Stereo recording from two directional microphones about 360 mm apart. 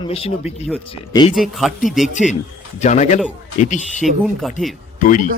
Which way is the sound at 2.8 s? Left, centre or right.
Centre.